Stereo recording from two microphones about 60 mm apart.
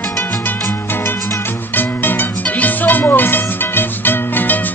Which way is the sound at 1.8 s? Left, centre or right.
Left.